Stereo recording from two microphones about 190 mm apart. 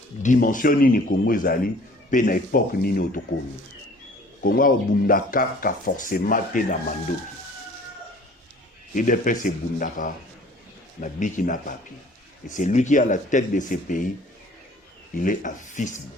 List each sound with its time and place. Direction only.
0.2 s speech: 45° left (ahead or behind)
4.4 s speech: 50° left (ahead or behind)
9.0 s speech: 45° left (ahead or behind)
15.1 s speech: 45° left (ahead or behind)